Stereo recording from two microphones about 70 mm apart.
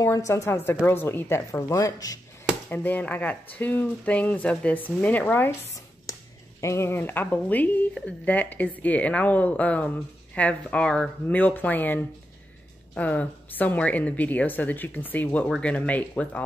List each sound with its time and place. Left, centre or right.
0.0 s a woman's voice: left
0.8 s speech: left
1.5 s speech: left
2.7 s a woman's voice: left
6.1 s a sound: left
6.6 s a woman's voice: left; by 11.1 s centre
11.2 s a woman's voice: left